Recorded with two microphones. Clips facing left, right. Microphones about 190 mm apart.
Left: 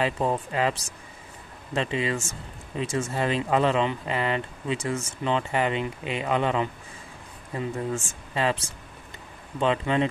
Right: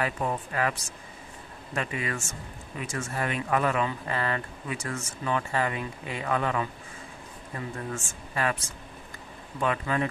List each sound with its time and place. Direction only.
0.0 s speech: 25° left (ahead or behind)
1.8 s speech: 25° left (ahead or behind)